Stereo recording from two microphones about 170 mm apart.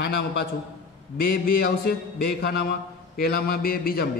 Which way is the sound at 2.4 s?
65° left (ahead or behind).